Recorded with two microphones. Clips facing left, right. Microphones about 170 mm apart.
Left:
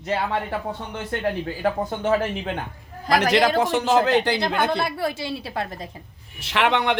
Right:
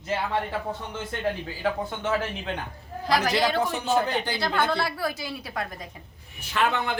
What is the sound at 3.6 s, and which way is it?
Speech, 90° left.